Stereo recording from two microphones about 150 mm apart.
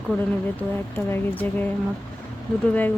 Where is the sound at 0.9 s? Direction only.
15° left (ahead or behind).